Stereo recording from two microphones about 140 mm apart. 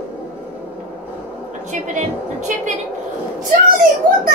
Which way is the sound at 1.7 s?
65° right (ahead or behind).